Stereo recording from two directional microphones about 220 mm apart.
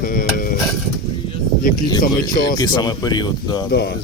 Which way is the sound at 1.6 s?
40° left (ahead or behind).